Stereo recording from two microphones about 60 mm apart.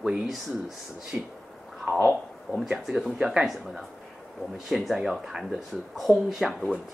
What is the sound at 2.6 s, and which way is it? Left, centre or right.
Speech, centre.